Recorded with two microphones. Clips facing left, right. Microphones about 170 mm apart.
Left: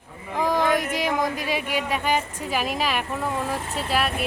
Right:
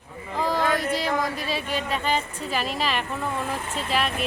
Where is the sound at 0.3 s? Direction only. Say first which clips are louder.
Left 2 dB; 15° left (ahead or behind).